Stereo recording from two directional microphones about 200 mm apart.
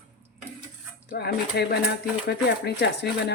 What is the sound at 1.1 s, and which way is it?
Speech, 50° left (ahead or behind).